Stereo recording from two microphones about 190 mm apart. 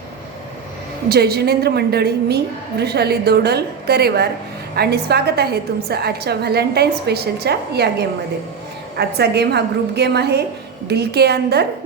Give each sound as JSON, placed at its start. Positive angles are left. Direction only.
{"t": 1.0, "sound": "a woman's voice", "side_deg": -55}